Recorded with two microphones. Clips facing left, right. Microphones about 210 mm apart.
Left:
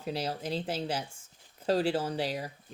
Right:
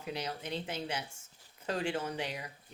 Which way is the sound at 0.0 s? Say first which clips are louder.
Left 5 dB; 35° left (ahead or behind).